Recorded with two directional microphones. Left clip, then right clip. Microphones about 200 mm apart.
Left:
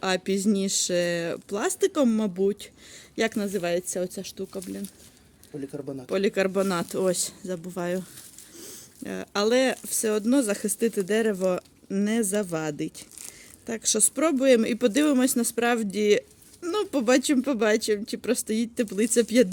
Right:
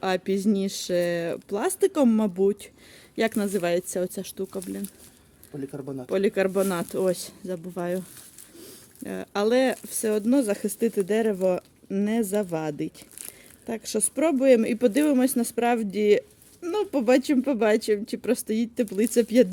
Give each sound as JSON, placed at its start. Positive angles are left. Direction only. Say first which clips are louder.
{"t": 0.0, "sound": "speech", "louder": "even", "side_deg": -5}
{"t": 5.5, "sound": "speech", "louder": "right 1 dB", "side_deg": -50}
{"t": 6.1, "sound": "speech", "louder": "right 1 dB", "side_deg": -5}